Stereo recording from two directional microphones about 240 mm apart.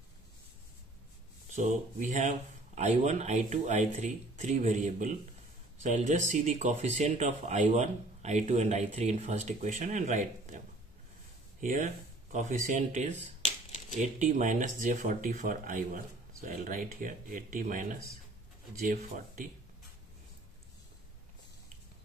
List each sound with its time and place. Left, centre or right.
1.5 s speech: right
11.6 s speech: right